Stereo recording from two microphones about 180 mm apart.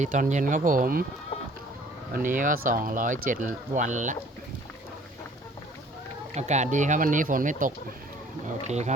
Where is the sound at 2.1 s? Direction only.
50° right (ahead or behind).